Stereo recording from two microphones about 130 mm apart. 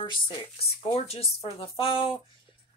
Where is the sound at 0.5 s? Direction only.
50° left (ahead or behind).